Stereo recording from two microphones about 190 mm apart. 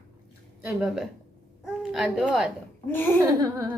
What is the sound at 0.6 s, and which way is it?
A child's voice, centre (ahead or behind).